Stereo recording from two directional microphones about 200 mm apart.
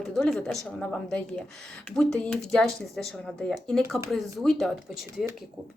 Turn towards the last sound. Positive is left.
turn(degrees=0)  # may be behind; listen again after turning